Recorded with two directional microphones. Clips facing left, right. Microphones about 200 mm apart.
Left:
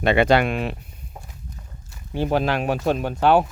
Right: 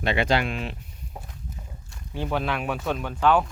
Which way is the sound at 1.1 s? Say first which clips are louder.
Right 1 dB; 5° right (ahead or behind).